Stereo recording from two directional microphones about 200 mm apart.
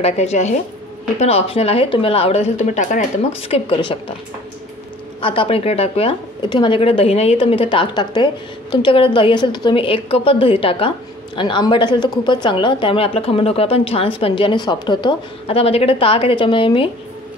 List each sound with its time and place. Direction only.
0.0 s a woman's voice: 35° left (ahead or behind)
5.2 s speech: 25° left (ahead or behind)